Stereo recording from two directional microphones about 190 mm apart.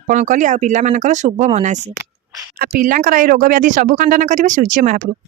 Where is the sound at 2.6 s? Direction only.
50° right (ahead or behind).